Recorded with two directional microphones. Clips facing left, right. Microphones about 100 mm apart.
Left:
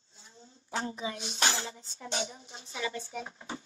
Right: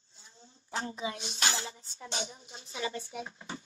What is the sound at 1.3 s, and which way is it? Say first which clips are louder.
Speech: left 2 dB; 35° left (ahead or behind).